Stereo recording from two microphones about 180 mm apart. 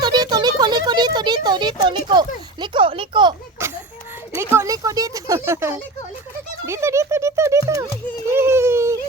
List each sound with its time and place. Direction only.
0.0 s a sound: 25° right (ahead or behind)
1.5 s a woman's voice: 25° right (ahead or behind)
3.6 s a sound: 15° right (ahead or behind)
4.4 s speech: 15° right (ahead or behind)
6.7 s music: 15° right (ahead or behind)
8.3 s baby cry: 15° right (ahead or behind)